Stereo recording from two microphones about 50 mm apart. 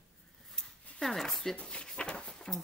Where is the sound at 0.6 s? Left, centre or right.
Centre.